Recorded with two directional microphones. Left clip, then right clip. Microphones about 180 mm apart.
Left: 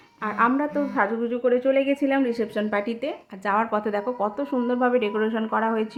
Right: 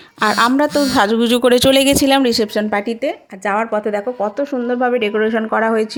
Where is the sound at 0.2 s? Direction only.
50° right (ahead or behind).